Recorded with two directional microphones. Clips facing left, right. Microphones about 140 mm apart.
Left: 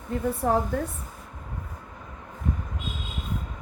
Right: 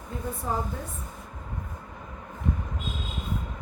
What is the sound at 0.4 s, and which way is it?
Speech, 65° left (ahead or behind).